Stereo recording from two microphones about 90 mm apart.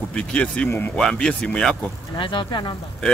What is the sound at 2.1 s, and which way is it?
Speech, 65° left (ahead or behind).